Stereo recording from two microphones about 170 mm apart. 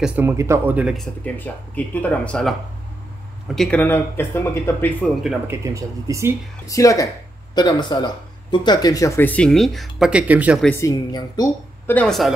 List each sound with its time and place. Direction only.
0.0 s speech: 10° right (ahead or behind)
3.5 s speech: 5° left (ahead or behind)
5.5 s speech: 20° right (ahead or behind)
6.7 s speech: 20° left (ahead or behind); by 10.6 s 10° right (ahead or behind)
10.6 s speech: 15° left (ahead or behind)
11.9 s speech: 5° left (ahead or behind)